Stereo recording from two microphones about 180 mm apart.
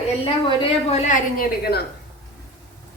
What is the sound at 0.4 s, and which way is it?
Speech, 30° left (ahead or behind).